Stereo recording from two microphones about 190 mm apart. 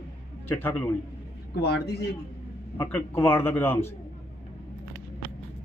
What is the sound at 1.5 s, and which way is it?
Speech, 60° left (ahead or behind).